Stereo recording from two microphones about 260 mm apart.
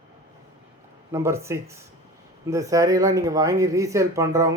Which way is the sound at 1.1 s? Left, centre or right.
Centre.